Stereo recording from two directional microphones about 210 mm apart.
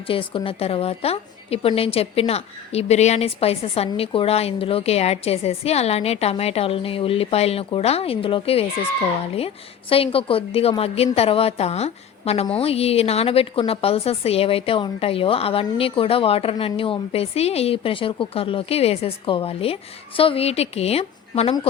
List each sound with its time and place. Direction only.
0.1 s a woman's voice: 25° left (ahead or behind)
9.9 s a woman's voice: 25° left (ahead or behind)